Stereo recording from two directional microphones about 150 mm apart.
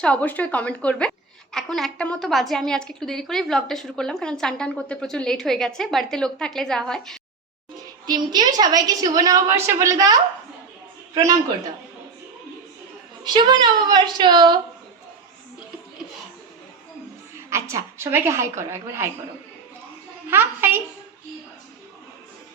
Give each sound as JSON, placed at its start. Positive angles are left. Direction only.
{"t": 0.0, "sound": "a woman's voice", "side_deg": 10}
{"t": 8.0, "sound": "a woman's voice", "side_deg": -25}
{"t": 13.2, "sound": "a woman's voice", "side_deg": -30}
{"t": 17.5, "sound": "a woman's voice", "side_deg": -20}
{"t": 20.3, "sound": "a woman's voice", "side_deg": -15}